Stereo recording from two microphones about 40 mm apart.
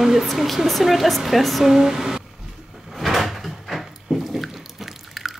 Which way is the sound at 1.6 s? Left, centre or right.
Centre.